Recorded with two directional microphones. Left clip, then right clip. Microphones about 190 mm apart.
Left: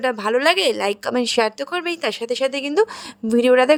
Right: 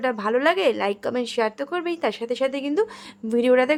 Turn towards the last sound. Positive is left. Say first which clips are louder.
# left 4 dB
turn(degrees=25)  # may be behind; listen again after turning